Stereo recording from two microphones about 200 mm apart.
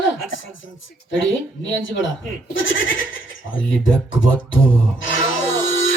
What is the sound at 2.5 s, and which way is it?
Speech, 70° left (ahead or behind).